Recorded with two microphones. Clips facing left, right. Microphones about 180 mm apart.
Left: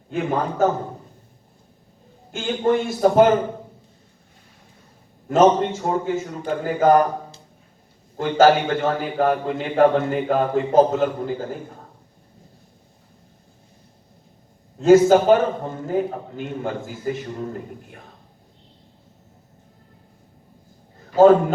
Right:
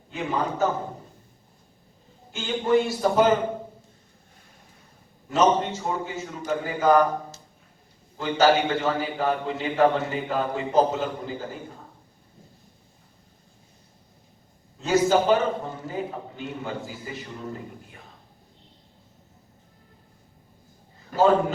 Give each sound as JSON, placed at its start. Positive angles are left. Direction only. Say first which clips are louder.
{"t": 0.1, "sound": "a man's voice", "louder": "left 4 dB", "side_deg": 50}
{"t": 2.3, "sound": "a man's voice", "louder": "left 2 dB", "side_deg": 50}
{"t": 5.3, "sound": "a man's voice", "louder": "left 5 dB", "side_deg": 50}
{"t": 8.2, "sound": "a man's voice", "louder": "left 5 dB", "side_deg": 50}
{"t": 14.8, "sound": "a man's voice", "louder": "left 8 dB", "side_deg": 50}
{"t": 21.1, "sound": "a man's voice", "louder": "left 8 dB", "side_deg": -50}